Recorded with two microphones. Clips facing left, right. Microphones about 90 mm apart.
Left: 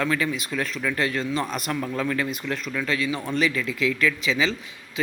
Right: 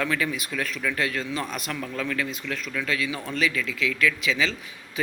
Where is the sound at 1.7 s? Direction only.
15° left (ahead or behind).